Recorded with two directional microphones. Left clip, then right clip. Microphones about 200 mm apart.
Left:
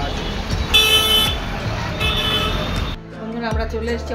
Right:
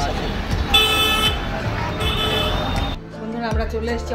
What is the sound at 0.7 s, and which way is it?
Vehicle, 35° left (ahead or behind).